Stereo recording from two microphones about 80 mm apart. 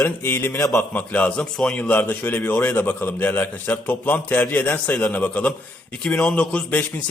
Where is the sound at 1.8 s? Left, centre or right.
Left.